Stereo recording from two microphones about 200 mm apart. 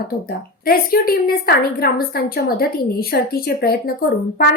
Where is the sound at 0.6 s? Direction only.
50° left (ahead or behind).